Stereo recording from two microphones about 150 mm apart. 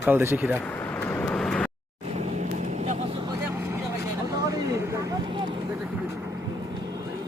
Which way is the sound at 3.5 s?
15° right (ahead or behind).